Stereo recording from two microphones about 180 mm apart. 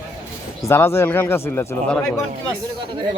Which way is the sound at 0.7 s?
15° left (ahead or behind).